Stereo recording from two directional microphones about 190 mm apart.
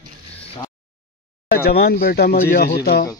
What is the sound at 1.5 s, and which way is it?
Speech, 55° left (ahead or behind).